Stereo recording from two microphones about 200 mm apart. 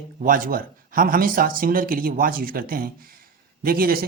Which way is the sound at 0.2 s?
45° right (ahead or behind).